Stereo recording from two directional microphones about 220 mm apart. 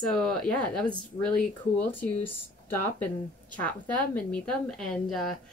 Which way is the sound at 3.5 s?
5° left (ahead or behind).